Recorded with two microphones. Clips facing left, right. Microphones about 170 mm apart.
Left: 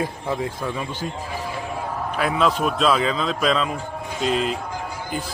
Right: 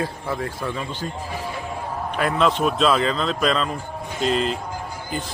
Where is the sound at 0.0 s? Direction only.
15° left (ahead or behind).